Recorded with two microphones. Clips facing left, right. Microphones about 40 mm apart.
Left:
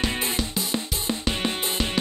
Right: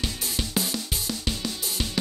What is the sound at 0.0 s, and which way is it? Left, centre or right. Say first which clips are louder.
Music: left 5 dB; left.